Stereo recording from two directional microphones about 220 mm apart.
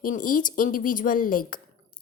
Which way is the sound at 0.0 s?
40° left (ahead or behind).